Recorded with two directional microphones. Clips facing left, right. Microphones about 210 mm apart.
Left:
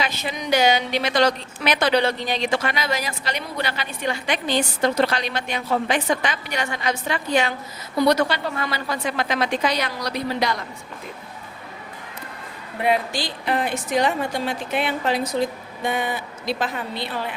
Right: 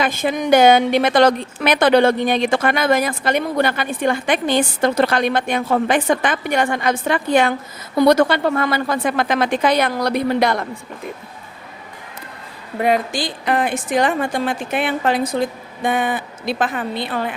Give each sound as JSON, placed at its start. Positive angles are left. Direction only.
{"t": 0.0, "sound": "a woman's voice", "side_deg": -50}
{"t": 12.8, "sound": "a woman's voice", "side_deg": -45}